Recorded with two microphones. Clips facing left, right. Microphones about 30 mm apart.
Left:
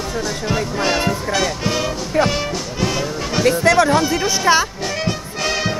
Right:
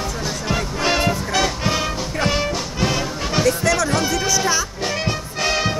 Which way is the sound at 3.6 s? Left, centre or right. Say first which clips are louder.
Left 5 dB; left.